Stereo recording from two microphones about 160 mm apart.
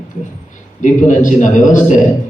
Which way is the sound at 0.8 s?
50° left (ahead or behind).